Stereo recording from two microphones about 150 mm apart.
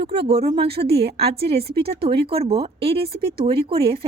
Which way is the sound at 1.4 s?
90° right.